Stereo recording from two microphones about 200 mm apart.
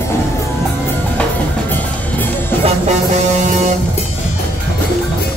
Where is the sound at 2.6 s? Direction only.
35° right (ahead or behind).